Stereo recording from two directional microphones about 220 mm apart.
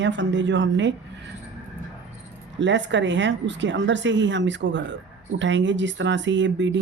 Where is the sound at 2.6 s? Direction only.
55° right (ahead or behind).